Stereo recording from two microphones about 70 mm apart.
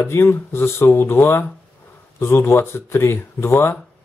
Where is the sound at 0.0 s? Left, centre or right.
Left.